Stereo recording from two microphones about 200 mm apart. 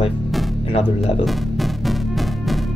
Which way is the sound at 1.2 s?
Centre (ahead or behind).